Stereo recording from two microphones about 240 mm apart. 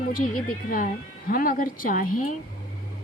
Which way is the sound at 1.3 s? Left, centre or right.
Left.